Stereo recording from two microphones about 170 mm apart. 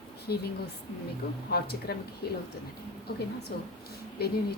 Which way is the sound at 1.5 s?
70° left (ahead or behind).